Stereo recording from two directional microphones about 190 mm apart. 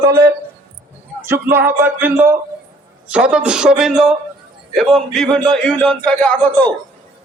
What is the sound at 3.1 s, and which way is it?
Speech, 5° right (ahead or behind).